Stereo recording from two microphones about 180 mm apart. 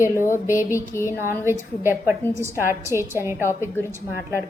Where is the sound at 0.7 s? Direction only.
15° left (ahead or behind).